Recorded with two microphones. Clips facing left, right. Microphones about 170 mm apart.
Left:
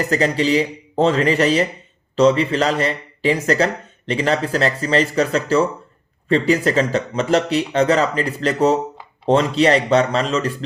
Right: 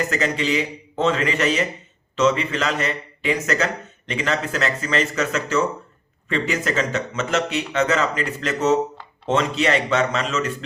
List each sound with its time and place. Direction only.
0.0 s speech: 35° left (ahead or behind)